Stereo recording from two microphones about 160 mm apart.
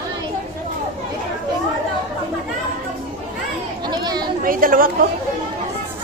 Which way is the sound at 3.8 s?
25° right (ahead or behind).